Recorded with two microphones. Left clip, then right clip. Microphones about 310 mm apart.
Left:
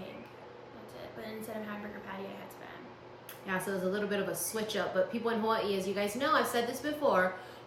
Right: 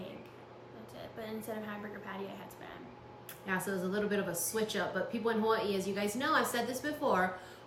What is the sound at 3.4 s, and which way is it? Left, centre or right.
A woman's voice, centre.